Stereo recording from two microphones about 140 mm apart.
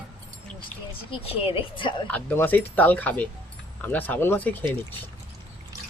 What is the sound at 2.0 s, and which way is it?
Speech, 15° left (ahead or behind).